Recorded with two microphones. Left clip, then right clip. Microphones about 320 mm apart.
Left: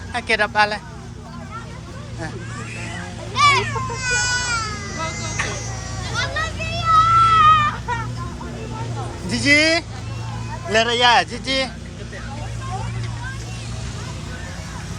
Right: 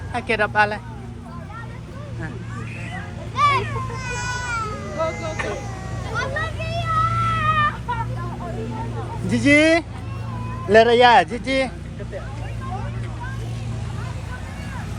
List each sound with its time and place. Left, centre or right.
0.1 s speech: centre
3.3 s a sound: centre
4.0 s baby cry: centre
6.1 s children playing: centre
9.3 s speech: centre